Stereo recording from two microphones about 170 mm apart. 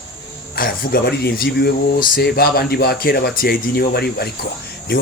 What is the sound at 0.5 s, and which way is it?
Speech, 60° left (ahead or behind).